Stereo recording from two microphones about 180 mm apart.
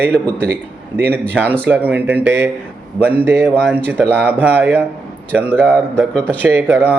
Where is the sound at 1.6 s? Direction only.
10° right (ahead or behind).